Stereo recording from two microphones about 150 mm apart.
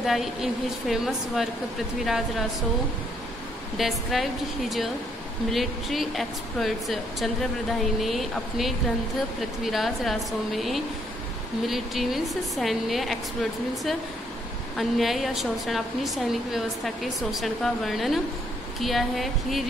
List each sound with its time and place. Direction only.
0.0 s a woman's voice: centre (ahead or behind)
3.7 s a woman's voice: centre (ahead or behind)